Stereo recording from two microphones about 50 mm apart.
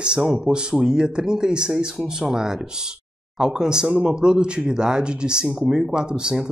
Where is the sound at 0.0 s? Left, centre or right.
Centre.